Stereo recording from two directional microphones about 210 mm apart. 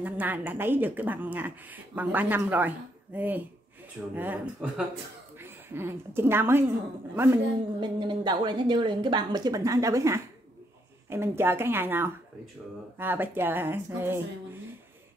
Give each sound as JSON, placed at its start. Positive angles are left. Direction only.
{"t": 0.0, "sound": "a woman's voice", "side_deg": -10}
{"t": 7.8, "sound": "a woman's voice", "side_deg": -20}